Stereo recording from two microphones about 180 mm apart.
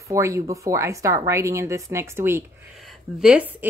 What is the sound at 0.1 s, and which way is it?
Speech, 15° right (ahead or behind).